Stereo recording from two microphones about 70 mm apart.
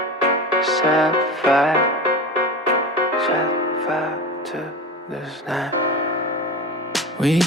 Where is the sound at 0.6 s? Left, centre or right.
Centre.